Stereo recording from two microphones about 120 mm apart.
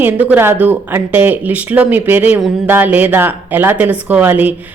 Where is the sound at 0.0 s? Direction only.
15° right (ahead or behind).